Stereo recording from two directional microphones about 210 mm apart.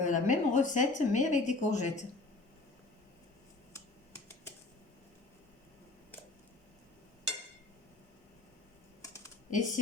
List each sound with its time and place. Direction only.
0.0 s speech: 35° left (ahead or behind)
9.0 s computer keyboard: 15° left (ahead or behind)
9.5 s speech: 35° left (ahead or behind)